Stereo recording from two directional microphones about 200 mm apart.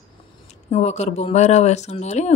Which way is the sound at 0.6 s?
35° left (ahead or behind).